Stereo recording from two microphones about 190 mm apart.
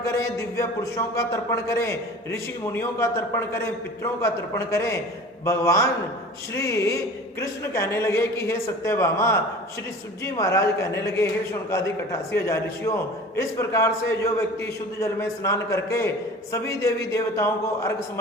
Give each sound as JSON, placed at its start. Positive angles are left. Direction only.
{"t": 0.0, "sound": "a man's voice", "side_deg": 15}